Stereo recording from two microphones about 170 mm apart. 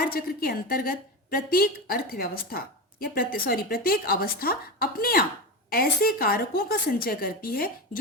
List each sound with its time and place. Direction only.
0.0 s a woman's voice: 60° left (ahead or behind)